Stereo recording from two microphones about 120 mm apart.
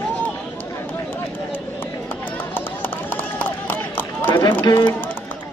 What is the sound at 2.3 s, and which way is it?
Run, 15° left (ahead or behind).